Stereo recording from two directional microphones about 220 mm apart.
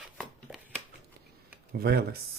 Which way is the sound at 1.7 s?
45° right (ahead or behind).